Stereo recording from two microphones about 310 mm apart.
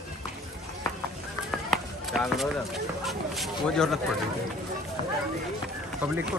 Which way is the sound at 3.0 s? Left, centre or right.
Centre.